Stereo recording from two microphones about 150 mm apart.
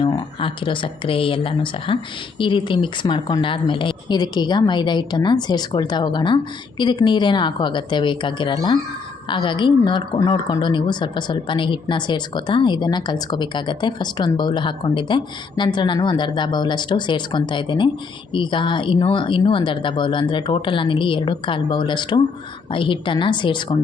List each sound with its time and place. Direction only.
0.0 s a woman's voice: 30° left (ahead or behind)